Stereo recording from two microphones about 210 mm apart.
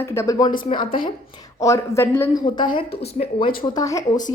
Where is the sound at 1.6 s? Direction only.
15° left (ahead or behind).